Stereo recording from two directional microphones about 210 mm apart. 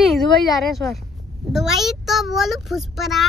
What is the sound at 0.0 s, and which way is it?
A woman's voice, centre (ahead or behind).